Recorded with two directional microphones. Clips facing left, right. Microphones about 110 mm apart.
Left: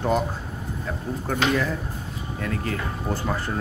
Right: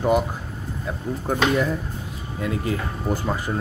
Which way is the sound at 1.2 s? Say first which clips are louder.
Right 3 dB; 15° right (ahead or behind).